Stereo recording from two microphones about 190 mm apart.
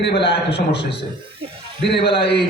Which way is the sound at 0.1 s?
30° left (ahead or behind).